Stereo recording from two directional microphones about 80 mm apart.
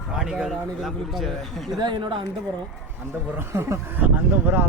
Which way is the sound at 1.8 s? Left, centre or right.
Right.